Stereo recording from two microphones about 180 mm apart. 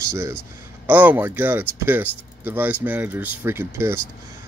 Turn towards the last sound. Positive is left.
turn(degrees=-15)  # may be behind; listen again after turning